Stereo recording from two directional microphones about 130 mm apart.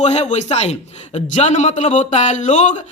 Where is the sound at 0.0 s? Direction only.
60° left (ahead or behind).